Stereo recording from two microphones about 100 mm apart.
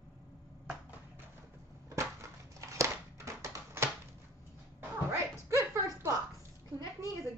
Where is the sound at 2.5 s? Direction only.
30° right (ahead or behind).